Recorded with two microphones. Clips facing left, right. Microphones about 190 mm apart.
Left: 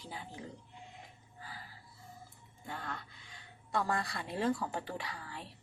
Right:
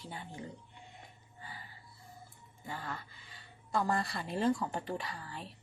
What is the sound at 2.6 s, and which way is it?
Speech, centre (ahead or behind).